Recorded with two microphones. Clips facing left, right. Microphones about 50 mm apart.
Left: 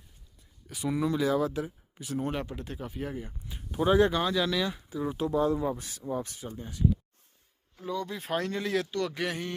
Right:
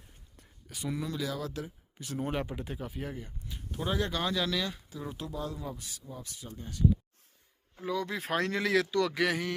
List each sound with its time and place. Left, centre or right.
0.7 s speech: centre
0.9 s speech: centre
2.0 s speech: centre
3.2 s speech: centre
4.2 s speech: centre
5.3 s speech: left
5.8 s speech: left
6.5 s speech: centre
7.9 s speech: right